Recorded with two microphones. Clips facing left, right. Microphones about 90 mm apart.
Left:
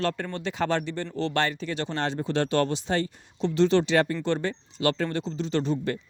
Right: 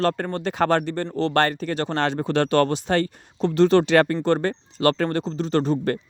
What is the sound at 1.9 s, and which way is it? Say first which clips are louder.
Speech: right 5 dB; 70° right (ahead or behind).